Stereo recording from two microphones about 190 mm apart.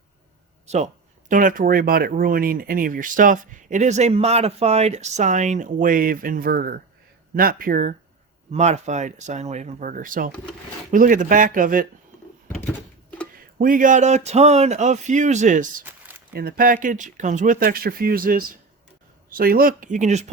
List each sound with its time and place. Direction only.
1.3 s speech: 45° right (ahead or behind)
13.6 s speech: 45° right (ahead or behind)
15.8 s a sound: 10° right (ahead or behind)
16.3 s speech: 50° right (ahead or behind)